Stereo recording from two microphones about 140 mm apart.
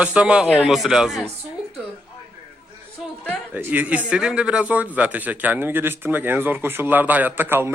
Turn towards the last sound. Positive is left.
turn(degrees=-15)  # may be behind; listen again after turning